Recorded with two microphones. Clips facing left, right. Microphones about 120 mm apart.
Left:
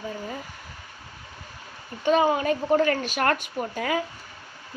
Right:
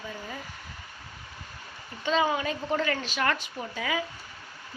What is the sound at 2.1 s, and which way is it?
A woman's voice, 50° left (ahead or behind).